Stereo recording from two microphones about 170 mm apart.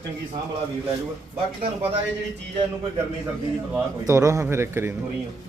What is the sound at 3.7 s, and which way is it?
Speech, 15° right (ahead or behind).